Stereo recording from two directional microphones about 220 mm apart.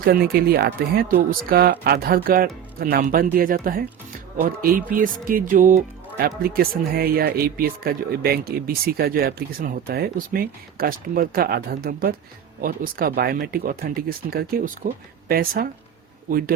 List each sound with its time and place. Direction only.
0.0 s speech: 45° right (ahead or behind)